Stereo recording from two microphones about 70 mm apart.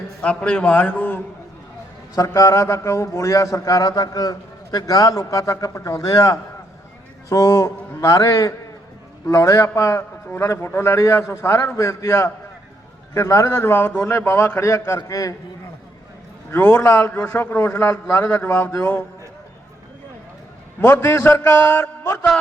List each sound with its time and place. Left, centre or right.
0.2 s a man's voice: centre
2.1 s a man's voice: left
15.1 s a man's voice: left
16.5 s a man's voice: left
20.8 s a man's voice: left